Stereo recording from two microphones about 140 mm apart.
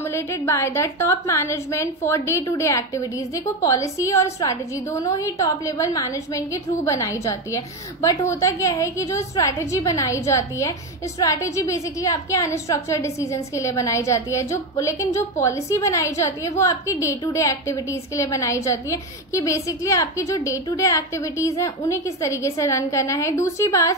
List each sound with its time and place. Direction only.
0.0 s a woman's voice: 20° left (ahead or behind)